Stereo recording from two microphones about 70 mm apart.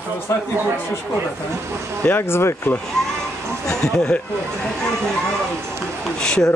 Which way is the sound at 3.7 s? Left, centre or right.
Centre.